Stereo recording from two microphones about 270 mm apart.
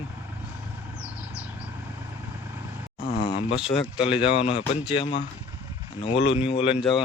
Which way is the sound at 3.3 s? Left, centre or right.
Centre.